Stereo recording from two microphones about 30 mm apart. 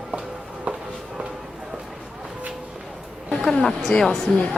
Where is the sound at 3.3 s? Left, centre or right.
Centre.